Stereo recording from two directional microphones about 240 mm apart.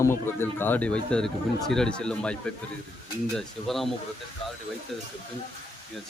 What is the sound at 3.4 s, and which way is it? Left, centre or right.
Speech, centre.